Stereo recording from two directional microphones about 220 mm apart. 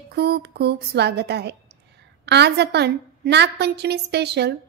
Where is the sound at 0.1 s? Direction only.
45° right (ahead or behind).